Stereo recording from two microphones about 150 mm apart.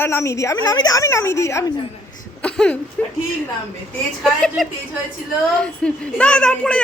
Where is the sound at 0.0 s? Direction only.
15° left (ahead or behind).